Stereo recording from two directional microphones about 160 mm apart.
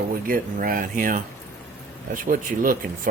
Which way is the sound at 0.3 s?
60° right (ahead or behind).